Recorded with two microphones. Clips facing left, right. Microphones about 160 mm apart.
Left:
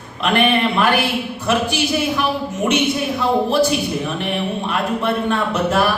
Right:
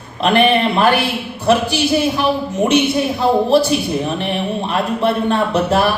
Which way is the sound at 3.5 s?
30° right (ahead or behind).